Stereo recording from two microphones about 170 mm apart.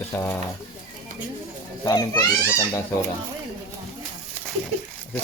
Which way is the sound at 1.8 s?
20° left (ahead or behind).